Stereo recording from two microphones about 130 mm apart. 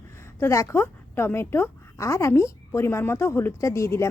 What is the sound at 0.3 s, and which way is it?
A woman's voice, 20° left (ahead or behind).